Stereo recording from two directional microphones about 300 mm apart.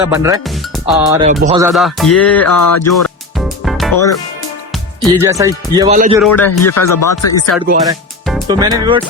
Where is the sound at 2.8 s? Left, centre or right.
Centre.